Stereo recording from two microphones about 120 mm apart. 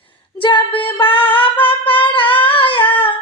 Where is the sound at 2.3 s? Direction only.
45° left (ahead or behind).